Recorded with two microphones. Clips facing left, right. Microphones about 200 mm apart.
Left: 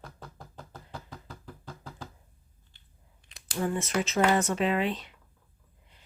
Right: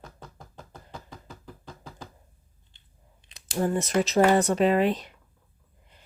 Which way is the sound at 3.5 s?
40° right (ahead or behind).